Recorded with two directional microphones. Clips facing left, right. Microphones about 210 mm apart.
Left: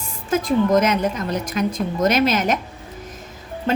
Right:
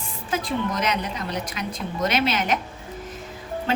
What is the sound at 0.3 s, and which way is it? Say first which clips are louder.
A woman's voice: left 8 dB; 45° left (ahead or behind).